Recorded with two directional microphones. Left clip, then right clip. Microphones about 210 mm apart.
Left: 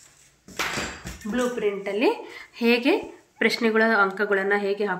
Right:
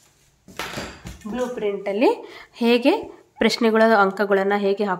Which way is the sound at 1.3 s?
60° right (ahead or behind).